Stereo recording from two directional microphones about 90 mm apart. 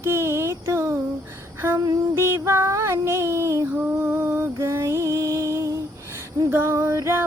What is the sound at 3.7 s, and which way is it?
Music, 25° right (ahead or behind).